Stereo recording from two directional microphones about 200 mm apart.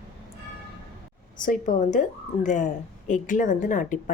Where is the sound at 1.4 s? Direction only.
40° left (ahead or behind).